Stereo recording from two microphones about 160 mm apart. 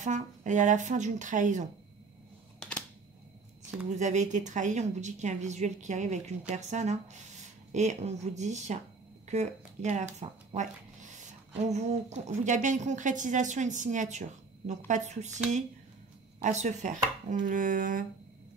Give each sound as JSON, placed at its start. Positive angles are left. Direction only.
{"t": 0.0, "sound": "a woman's voice", "side_deg": -50}
{"t": 3.9, "sound": "a woman's voice", "side_deg": -45}
{"t": 16.4, "sound": "a woman's voice", "side_deg": -50}